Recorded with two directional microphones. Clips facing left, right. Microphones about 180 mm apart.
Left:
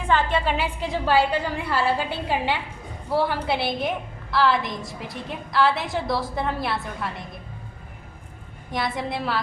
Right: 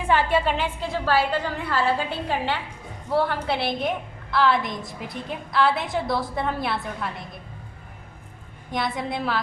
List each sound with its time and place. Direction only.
0.1 s a woman's voice: 5° right (ahead or behind)
0.5 s a woman's voice: 10° left (ahead or behind)
8.7 s a woman's voice: centre (ahead or behind)